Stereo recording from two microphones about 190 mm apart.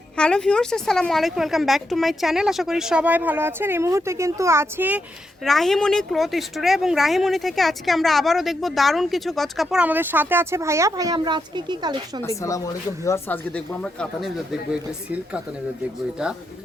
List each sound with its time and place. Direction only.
0.2 s speech: 5° left (ahead or behind)
5.5 s speech: centre (ahead or behind); by 12.2 s 25° right (ahead or behind)
12.2 s speech: 15° left (ahead or behind); by 15.4 s 5° right (ahead or behind)